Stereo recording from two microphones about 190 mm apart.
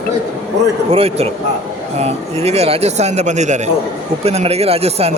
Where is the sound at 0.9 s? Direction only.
30° right (ahead or behind).